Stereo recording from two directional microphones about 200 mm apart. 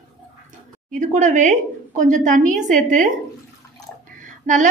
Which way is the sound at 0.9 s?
40° right (ahead or behind).